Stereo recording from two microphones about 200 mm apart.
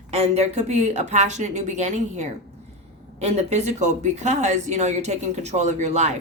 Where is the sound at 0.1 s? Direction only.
30° right (ahead or behind).